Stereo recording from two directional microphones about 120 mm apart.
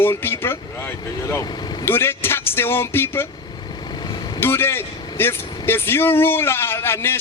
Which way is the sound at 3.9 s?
35° left (ahead or behind).